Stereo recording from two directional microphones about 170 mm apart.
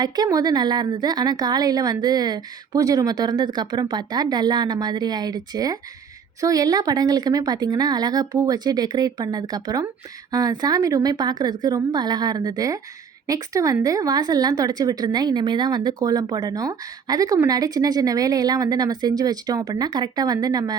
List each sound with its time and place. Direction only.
0.0 s a woman's voice: 20° right (ahead or behind)